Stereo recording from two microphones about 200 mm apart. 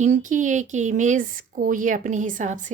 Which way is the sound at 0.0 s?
40° right (ahead or behind).